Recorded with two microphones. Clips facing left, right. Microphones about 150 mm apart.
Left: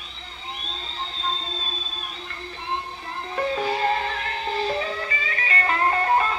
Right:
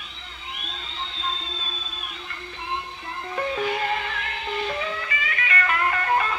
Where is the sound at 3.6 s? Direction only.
35° left (ahead or behind).